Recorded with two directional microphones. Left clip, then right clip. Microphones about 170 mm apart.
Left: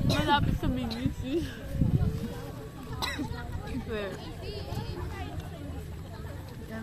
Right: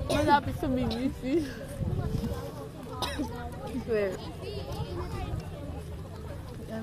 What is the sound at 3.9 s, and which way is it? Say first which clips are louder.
Speech: right 7 dB; 35° right (ahead or behind).